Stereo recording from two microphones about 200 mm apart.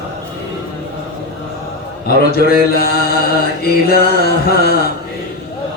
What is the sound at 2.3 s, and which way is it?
Mantra, 50° left (ahead or behind).